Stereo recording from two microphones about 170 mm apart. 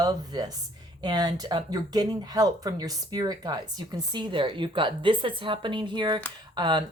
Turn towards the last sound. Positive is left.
turn(degrees=-25)  # may be behind; listen again after turning